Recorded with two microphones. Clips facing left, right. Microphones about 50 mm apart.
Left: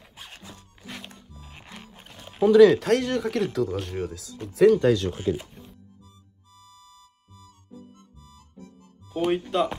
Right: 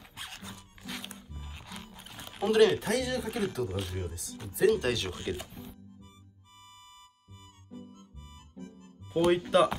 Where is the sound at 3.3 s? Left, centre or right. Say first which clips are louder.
Left 7 dB; left.